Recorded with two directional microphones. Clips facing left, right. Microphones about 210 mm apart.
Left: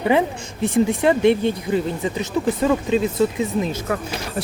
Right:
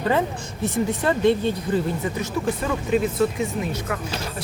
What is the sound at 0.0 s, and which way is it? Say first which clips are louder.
Speech: left 4 dB; 15° left (ahead or behind).